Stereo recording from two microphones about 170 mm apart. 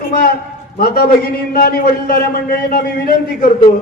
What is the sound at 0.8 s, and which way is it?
A man's voice, 65° left (ahead or behind).